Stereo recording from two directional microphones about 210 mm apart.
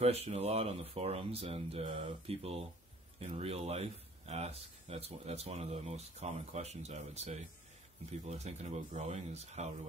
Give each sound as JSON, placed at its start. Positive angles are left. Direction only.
{"t": 0.0, "sound": "speech", "side_deg": -30}